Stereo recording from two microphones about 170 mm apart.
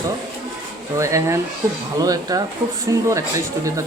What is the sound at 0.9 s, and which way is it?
Speech, 15° right (ahead or behind).